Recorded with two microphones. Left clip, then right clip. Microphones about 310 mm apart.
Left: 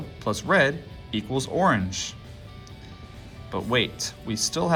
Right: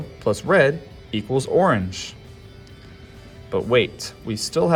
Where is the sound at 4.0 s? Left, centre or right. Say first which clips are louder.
Even; centre.